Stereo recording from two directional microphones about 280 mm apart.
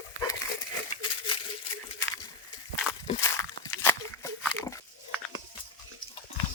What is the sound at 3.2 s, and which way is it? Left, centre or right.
Pig, centre.